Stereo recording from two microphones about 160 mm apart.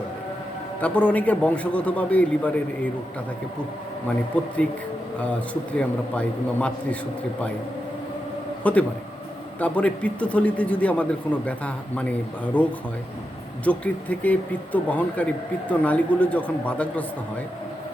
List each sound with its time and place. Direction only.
0.8 s a man's voice: 10° left (ahead or behind)
4.4 s a man's voice: 10° left (ahead or behind)
5.7 s a man's voice: 10° left (ahead or behind)
8.7 s a man's voice: 10° left (ahead or behind)
13.7 s a man's voice: 10° left (ahead or behind)